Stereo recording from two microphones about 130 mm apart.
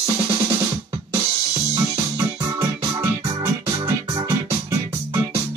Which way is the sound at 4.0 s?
45° right (ahead or behind).